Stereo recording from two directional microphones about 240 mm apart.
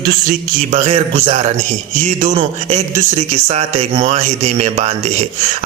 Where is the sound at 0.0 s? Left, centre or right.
Right.